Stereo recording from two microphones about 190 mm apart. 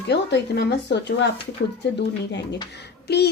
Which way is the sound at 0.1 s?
60° left (ahead or behind).